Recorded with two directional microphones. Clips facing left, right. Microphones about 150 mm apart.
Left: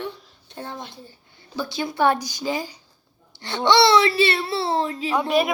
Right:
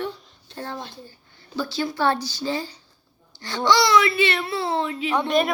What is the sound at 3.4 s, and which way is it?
A child's voice, 20° left (ahead or behind).